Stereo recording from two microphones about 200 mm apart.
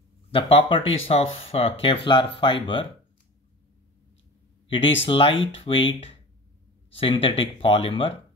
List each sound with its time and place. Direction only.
0.3 s speech: 25° left (ahead or behind)
5.0 s speech: 25° left (ahead or behind)